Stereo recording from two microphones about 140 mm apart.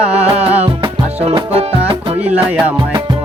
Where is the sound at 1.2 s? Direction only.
40° right (ahead or behind).